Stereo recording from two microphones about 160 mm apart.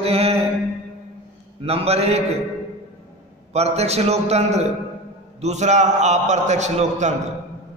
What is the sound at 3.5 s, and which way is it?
A man's voice, 40° right (ahead or behind).